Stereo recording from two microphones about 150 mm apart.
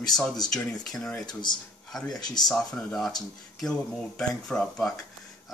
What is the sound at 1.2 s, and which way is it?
Speech, 30° left (ahead or behind).